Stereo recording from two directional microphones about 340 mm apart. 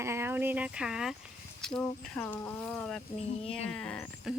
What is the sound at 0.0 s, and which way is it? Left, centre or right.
Speech, centre.